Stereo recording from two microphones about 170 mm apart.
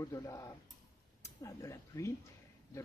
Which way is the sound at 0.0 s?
20° left (ahead or behind).